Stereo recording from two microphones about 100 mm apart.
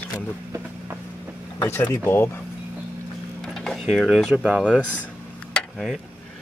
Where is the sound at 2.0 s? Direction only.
25° left (ahead or behind).